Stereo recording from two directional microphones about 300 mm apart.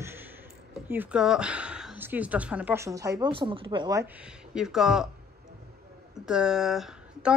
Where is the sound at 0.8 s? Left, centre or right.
Centre.